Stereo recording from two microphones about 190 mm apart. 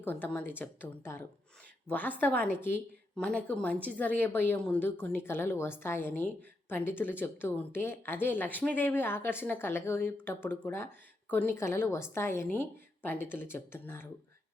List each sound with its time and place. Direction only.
0.0 s a woman's voice: 10° left (ahead or behind)